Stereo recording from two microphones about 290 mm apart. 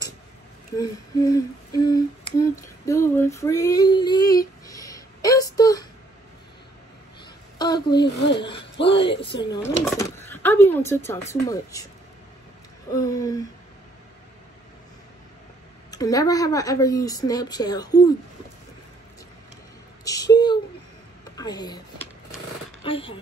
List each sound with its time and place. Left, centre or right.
0.7 s humming: centre
7.5 s a woman's voice: centre
7.9 s speech: left
8.4 s humming: centre
12.9 s humming: centre
15.9 s humming: centre
20.1 s humming: centre
21.2 s a sound: centre
22.8 s speech: centre